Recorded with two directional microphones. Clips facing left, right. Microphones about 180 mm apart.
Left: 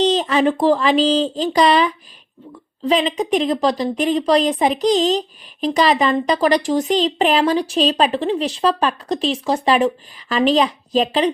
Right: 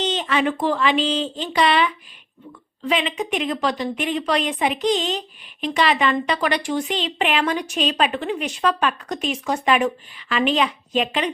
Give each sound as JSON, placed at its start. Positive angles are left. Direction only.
{"t": 0.0, "sound": "a woman's voice", "side_deg": 35}